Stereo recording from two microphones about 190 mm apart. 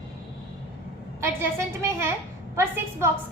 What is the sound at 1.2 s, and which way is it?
A woman's voice, 15° right (ahead or behind).